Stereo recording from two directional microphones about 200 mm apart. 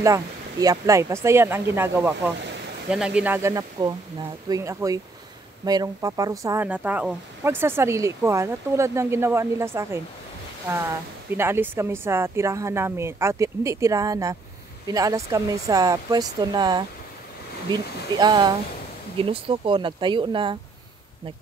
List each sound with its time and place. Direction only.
0.0 s speech: 15° right (ahead or behind)
11.3 s speech: 10° right (ahead or behind)